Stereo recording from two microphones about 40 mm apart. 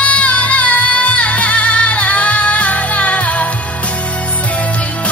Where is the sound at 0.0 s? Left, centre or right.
Left.